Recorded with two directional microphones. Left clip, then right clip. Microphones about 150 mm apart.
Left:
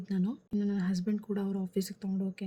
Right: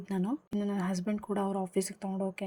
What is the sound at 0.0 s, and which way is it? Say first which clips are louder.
Speech: right 2 dB; 20° right (ahead or behind).